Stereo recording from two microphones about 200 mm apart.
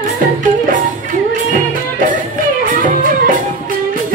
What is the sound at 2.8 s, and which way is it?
Music, 40° right (ahead or behind).